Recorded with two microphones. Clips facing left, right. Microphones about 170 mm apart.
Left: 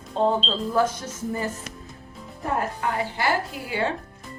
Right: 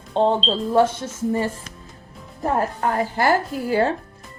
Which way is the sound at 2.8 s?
45° right (ahead or behind).